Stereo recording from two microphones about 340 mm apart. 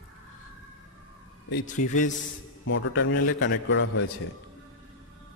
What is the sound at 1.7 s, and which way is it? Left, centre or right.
Speech, left.